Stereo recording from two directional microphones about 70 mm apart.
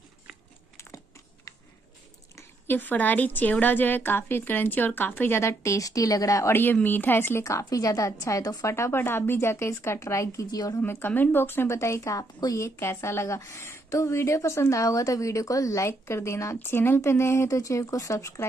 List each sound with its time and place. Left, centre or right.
2.6 s a woman's voice: left
6.5 s a woman's voice: left
7.4 s a woman's voice: left
8.7 s a woman's voice: left
10.8 s a woman's voice: left
12.6 s a woman's voice: left
16.5 s a woman's voice: left